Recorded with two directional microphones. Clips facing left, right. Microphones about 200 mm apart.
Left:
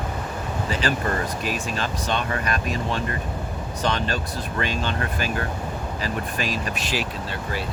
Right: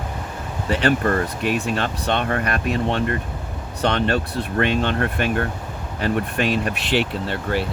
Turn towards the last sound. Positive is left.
turn(degrees=-65)  # may be behind; listen again after turning